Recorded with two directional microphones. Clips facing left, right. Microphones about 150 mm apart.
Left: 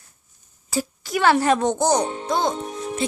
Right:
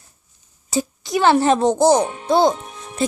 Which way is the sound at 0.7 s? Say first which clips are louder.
Right 4 dB; 20° right (ahead or behind).